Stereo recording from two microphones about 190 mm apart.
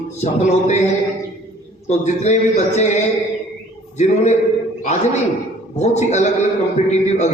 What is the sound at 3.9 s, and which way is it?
Speech, 35° left (ahead or behind).